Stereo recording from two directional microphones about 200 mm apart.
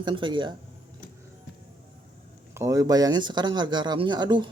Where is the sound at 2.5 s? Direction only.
15° right (ahead or behind).